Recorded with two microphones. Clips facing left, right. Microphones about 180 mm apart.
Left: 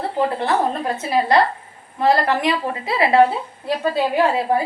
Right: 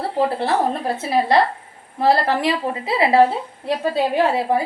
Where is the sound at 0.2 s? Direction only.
30° right (ahead or behind).